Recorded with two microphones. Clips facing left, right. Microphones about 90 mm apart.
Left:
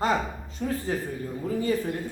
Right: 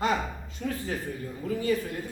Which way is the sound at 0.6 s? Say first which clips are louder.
Left 3 dB; 35° left (ahead or behind).